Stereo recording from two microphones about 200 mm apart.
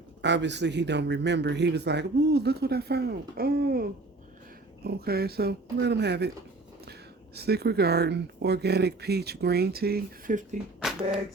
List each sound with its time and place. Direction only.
0.2 s speech: 60° right (ahead or behind)
7.3 s speech: 55° right (ahead or behind)
10.8 s a sound: centre (ahead or behind)